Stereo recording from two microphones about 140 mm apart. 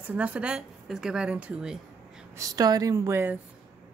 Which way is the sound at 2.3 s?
25° right (ahead or behind).